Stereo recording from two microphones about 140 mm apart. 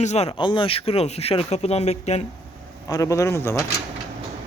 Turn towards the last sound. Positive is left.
turn(degrees=20)  # may be behind; listen again after turning